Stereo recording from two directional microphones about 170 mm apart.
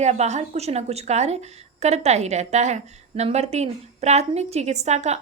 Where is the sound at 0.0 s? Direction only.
40° right (ahead or behind).